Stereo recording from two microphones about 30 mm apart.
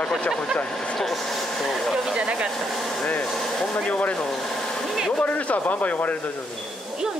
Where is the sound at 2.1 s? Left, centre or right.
Right.